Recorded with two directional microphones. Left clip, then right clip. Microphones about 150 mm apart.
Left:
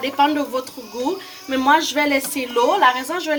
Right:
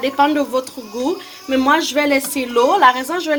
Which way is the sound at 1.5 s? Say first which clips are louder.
Right 1 dB; 25° right (ahead or behind).